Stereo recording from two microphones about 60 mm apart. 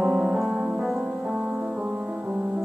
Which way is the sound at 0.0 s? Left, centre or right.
Centre.